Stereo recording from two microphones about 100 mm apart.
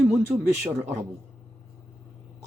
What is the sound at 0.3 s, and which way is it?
Speech, 20° right (ahead or behind).